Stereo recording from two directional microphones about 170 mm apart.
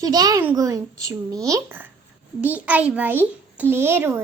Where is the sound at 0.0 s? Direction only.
20° right (ahead or behind).